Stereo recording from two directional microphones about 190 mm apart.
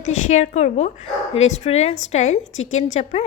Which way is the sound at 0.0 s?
40° left (ahead or behind).